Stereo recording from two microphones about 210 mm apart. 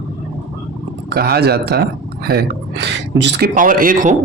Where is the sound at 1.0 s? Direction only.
50° right (ahead or behind).